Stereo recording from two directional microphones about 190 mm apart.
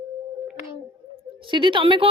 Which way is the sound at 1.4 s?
25° right (ahead or behind).